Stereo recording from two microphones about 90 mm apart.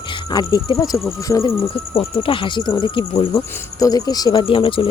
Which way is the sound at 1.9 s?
75° left (ahead or behind).